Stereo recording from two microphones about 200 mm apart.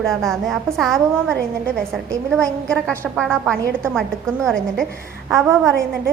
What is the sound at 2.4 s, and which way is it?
A woman's voice, 5° left (ahead or behind).